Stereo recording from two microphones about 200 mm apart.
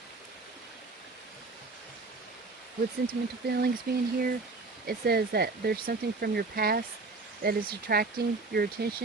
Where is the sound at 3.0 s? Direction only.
50° right (ahead or behind).